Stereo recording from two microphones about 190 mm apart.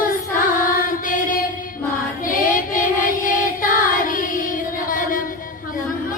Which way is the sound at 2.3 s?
45° left (ahead or behind).